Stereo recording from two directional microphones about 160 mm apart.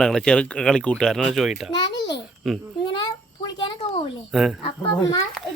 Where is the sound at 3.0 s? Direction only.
25° left (ahead or behind).